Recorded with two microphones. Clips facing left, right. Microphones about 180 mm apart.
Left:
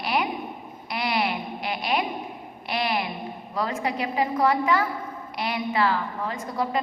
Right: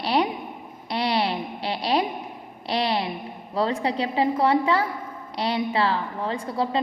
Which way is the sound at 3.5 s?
30° right (ahead or behind).